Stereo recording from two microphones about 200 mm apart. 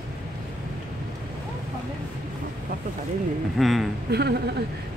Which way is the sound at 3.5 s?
Centre (ahead or behind).